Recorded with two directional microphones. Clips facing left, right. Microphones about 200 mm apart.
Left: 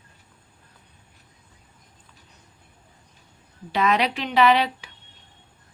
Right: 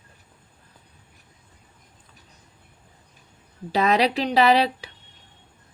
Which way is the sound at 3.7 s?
35° right (ahead or behind).